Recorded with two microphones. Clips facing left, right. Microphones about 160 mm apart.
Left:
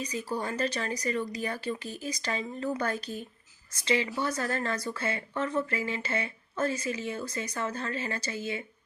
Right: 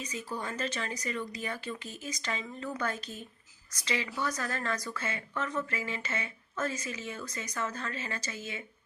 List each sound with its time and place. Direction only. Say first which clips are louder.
0.0 s speech: left 5 dB; 35° left (ahead or behind)